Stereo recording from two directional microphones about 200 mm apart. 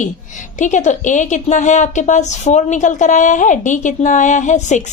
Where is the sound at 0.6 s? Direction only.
35° left (ahead or behind).